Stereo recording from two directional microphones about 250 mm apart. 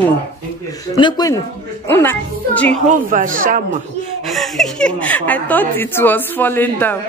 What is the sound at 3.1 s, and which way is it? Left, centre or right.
Speech, right.